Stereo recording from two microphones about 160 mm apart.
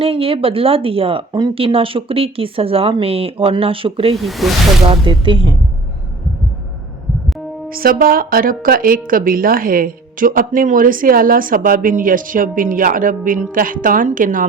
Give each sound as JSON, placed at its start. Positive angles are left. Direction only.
{"t": 0.0, "sound": "speech", "side_deg": -35}
{"t": 4.2, "sound": "speech", "side_deg": 0}
{"t": 4.9, "sound": "speech", "side_deg": -30}
{"t": 7.7, "sound": "a woman's voice", "side_deg": -65}